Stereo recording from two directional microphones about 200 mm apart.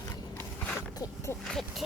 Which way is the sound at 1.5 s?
Centre (ahead or behind).